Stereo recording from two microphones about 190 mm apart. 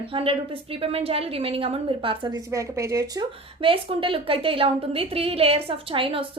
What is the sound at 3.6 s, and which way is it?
A woman's voice, 30° right (ahead or behind).